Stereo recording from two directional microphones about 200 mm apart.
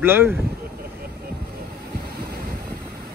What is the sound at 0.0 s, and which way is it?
Speech, 10° right (ahead or behind).